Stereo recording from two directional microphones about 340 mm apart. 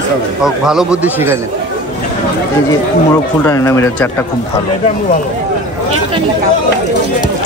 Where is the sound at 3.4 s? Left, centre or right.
Centre.